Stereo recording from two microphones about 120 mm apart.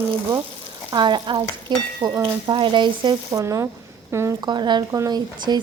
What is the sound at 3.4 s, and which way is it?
Speech, 25° right (ahead or behind).